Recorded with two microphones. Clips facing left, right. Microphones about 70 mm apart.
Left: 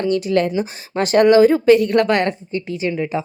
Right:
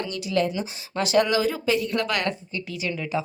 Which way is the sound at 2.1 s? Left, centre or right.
Left.